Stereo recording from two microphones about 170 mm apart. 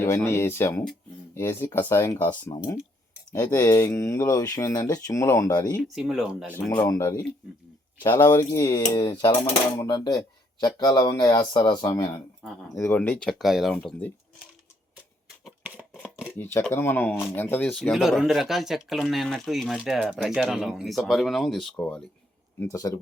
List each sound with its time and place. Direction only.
0.0 s speech: 15° left (ahead or behind)
2.5 s speech: 20° left (ahead or behind)
5.9 s speech: centre (ahead or behind)
6.7 s speech: 20° left (ahead or behind)
13.0 s speech: 5° left (ahead or behind)
15.4 s a sound: 10° right (ahead or behind)
16.4 s speech: 15° left (ahead or behind)
22.6 s speech: 20° left (ahead or behind)